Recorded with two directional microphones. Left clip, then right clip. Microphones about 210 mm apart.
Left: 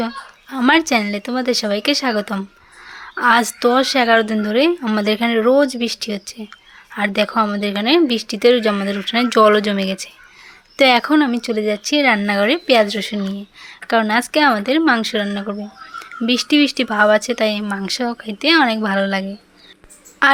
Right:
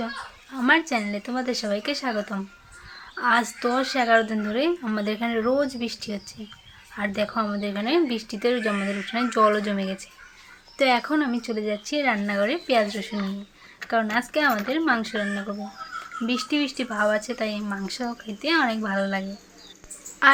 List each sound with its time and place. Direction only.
0.5 s speech: 45° left (ahead or behind)
20.2 s a woman's voice: 50° left (ahead or behind)